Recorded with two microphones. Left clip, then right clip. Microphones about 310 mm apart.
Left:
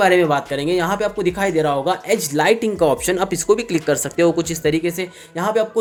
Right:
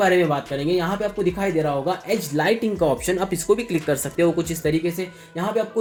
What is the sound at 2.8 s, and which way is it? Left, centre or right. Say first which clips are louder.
Speech: left 4 dB; left.